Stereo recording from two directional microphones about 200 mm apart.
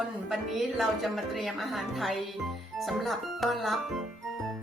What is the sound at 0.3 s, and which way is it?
Speech, centre (ahead or behind).